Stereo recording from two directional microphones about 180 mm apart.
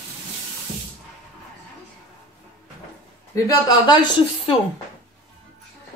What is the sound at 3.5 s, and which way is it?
Speech, 25° left (ahead or behind).